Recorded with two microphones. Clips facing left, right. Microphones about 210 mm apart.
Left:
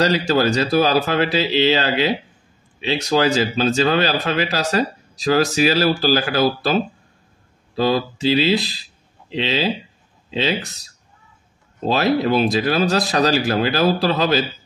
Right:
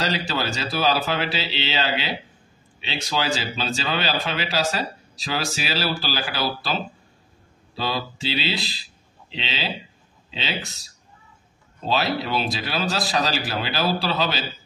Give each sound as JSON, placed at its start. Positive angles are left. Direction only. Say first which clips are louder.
{"t": 0.0, "sound": "speech", "louder": "left 9 dB", "side_deg": 45}
{"t": 11.8, "sound": "speech", "louder": "left 7 dB", "side_deg": 50}